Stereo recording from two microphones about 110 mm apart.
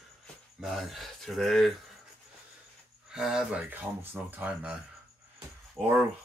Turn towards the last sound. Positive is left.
turn(degrees=0)  # may be behind; listen again after turning